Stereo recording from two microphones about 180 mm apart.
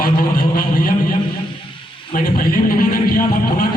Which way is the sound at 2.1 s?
55° left (ahead or behind).